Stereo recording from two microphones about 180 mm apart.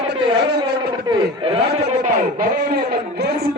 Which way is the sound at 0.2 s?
25° right (ahead or behind).